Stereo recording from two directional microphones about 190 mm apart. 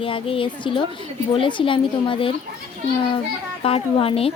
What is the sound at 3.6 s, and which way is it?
Speech, 30° left (ahead or behind).